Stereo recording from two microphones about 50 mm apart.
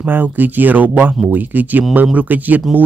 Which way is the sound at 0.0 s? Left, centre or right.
Right.